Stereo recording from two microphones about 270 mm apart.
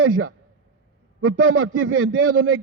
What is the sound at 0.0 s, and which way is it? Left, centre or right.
A man's voice, right.